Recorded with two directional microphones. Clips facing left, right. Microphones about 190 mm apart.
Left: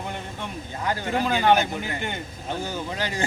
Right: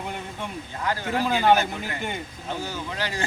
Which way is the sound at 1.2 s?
5° right (ahead or behind).